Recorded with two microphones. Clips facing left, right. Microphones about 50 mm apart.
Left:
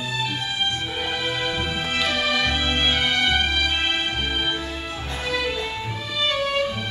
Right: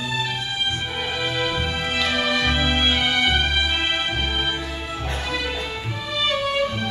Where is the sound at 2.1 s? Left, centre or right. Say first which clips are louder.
Right 1 dB; centre.